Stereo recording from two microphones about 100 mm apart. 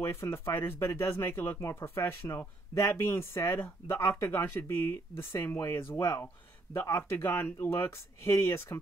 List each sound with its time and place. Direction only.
0.0 s speech: 25° left (ahead or behind)